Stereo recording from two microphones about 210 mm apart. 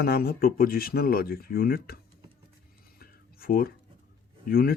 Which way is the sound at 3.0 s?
45° left (ahead or behind).